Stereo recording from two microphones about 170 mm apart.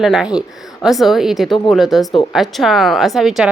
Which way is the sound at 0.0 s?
5° right (ahead or behind).